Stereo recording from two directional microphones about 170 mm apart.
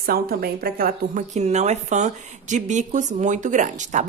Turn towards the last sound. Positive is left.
turn(degrees=-45)  # may be behind; listen again after turning